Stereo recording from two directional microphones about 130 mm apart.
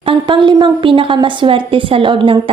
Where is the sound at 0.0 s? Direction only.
40° right (ahead or behind).